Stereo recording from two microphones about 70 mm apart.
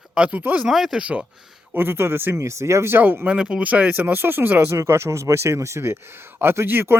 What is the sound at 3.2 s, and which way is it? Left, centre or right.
Speech, centre.